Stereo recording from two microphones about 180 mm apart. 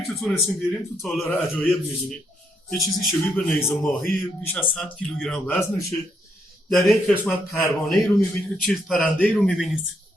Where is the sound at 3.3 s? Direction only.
15° left (ahead or behind).